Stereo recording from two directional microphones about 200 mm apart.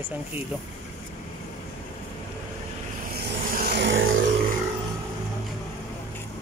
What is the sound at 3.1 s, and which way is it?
Vehicle, 55° right (ahead or behind).